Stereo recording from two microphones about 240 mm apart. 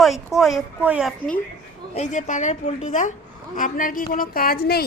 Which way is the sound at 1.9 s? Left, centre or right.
Left.